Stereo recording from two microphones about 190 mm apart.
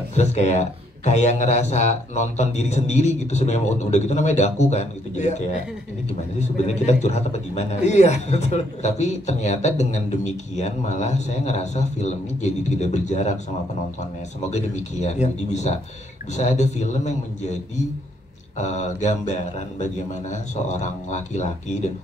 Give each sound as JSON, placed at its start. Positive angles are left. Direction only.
{"t": 0.1, "sound": "a man's voice", "side_deg": 35}
{"t": 6.4, "sound": "a man's voice", "side_deg": 35}
{"t": 14.5, "sound": "a man's voice", "side_deg": 35}
{"t": 18.6, "sound": "a man's voice", "side_deg": 35}